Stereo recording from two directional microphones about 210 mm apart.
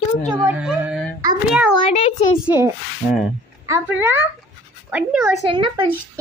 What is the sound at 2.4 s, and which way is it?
Speech, 10° right (ahead or behind).